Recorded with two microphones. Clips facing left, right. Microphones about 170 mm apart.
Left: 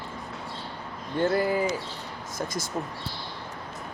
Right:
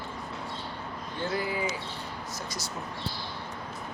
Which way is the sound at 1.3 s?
50° left (ahead or behind).